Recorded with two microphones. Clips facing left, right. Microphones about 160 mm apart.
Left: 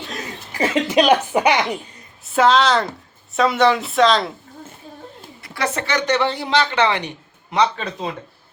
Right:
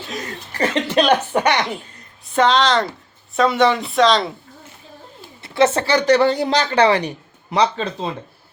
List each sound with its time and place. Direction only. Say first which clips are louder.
0.5 s speech: left 1 dB; 10° left (ahead or behind)
5.4 s a woman's voice: right 8 dB; 25° right (ahead or behind)